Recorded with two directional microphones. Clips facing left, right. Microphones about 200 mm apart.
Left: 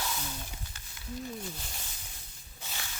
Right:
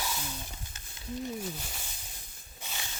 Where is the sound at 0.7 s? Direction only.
20° right (ahead or behind).